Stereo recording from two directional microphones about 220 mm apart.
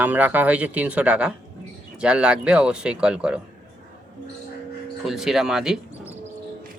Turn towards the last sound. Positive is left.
turn(degrees=0)  # may be behind; listen again after turning